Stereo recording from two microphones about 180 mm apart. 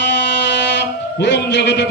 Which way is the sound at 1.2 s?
75° left (ahead or behind).